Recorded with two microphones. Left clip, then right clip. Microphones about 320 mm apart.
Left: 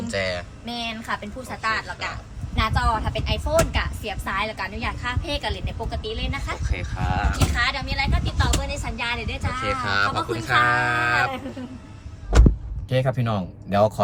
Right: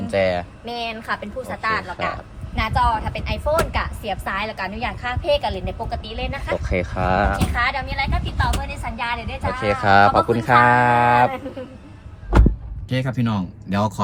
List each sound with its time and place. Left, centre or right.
0.1 s speech: centre
1.0 s speech: right
12.9 s speech: centre